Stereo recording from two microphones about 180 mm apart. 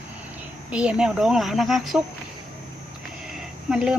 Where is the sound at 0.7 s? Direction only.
5° right (ahead or behind).